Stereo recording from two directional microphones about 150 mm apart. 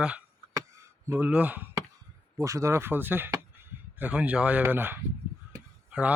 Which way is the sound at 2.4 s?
20° right (ahead or behind).